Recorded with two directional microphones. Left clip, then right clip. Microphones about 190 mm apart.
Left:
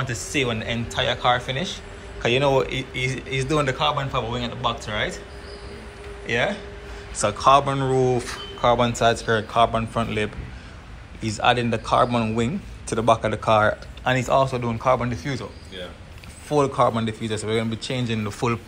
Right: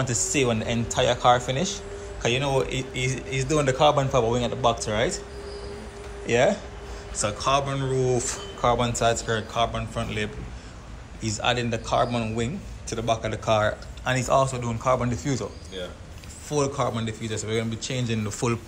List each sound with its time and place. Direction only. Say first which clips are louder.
0.0 s speech: even; 20° right (ahead or behind)
2.2 s speech: left 5 dB; 10° right (ahead or behind)
3.7 s speech: right 3 dB; 30° right (ahead or behind)
6.2 s speech: right 2 dB; 25° right (ahead or behind)
7.2 s a man's voice: left 7 dB; 5° right (ahead or behind)
8.2 s a man's voice: left 2 dB; 20° right (ahead or behind)
15.0 s speech: even; 20° right (ahead or behind)
16.4 s speech: left 6 dB; 5° right (ahead or behind)